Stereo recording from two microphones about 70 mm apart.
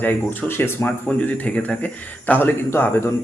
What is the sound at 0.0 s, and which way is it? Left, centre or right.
Speech, left.